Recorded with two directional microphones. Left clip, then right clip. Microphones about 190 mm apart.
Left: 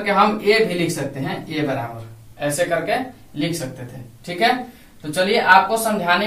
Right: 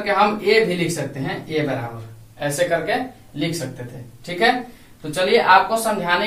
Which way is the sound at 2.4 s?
20° right (ahead or behind).